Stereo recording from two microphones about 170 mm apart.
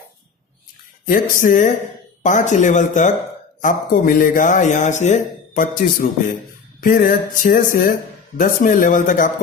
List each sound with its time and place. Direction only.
1.0 s speech: 55° left (ahead or behind)